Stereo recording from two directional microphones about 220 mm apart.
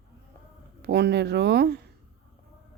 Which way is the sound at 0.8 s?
50° right (ahead or behind).